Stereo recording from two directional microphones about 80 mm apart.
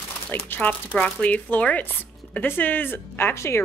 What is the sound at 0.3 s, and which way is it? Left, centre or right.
A woman's voice, left.